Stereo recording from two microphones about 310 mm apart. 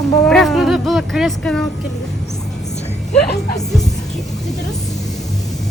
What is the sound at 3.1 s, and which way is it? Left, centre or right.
Speech, left.